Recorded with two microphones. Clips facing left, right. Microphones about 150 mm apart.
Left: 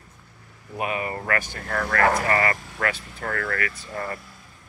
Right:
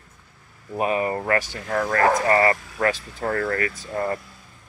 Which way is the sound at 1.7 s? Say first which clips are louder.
Right 4 dB; 15° right (ahead or behind).